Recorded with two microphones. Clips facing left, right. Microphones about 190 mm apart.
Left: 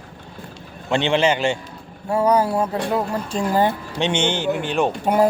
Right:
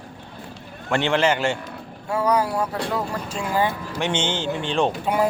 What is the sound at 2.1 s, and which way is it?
Speech, 30° left (ahead or behind).